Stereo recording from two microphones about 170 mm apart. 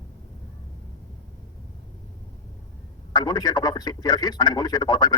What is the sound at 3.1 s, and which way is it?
A man's voice, 25° left (ahead or behind).